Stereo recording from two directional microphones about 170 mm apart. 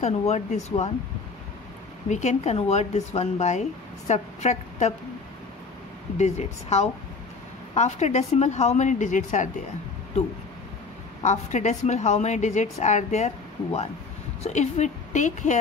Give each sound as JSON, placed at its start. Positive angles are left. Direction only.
{"t": 0.0, "sound": "speech", "side_deg": 40}
{"t": 2.0, "sound": "a woman's voice", "side_deg": 40}
{"t": 6.1, "sound": "a woman's voice", "side_deg": 40}
{"t": 11.2, "sound": "a woman's voice", "side_deg": 45}